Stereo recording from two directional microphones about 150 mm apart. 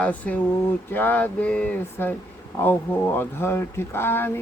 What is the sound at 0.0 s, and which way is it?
Speech, 10° left (ahead or behind).